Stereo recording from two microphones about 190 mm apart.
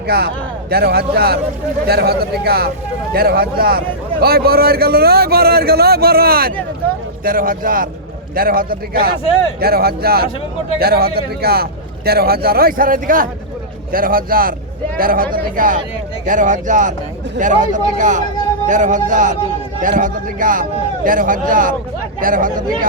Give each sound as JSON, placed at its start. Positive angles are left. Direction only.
{"t": 0.1, "sound": "a man's voice", "side_deg": -55}